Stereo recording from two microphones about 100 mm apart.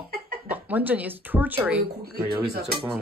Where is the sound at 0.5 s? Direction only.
15° right (ahead or behind).